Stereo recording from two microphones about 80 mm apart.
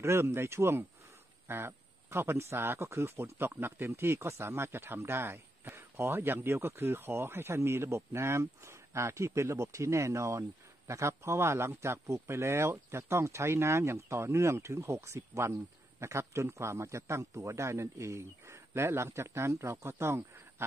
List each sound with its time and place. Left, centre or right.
0.0 s speech: right